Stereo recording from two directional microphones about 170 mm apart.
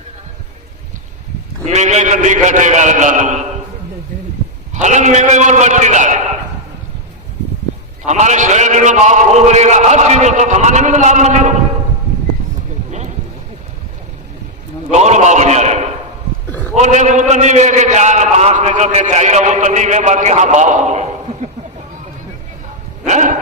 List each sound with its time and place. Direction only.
1.6 s a man's voice: 40° right (ahead or behind)
4.7 s a man's voice: 45° right (ahead or behind)
8.0 s a man's voice: 45° right (ahead or behind)
14.8 s a man's voice: 45° right (ahead or behind)
16.5 s a sound: 10° left (ahead or behind)
16.7 s a man's voice: 45° right (ahead or behind)
23.0 s dog: 45° right (ahead or behind)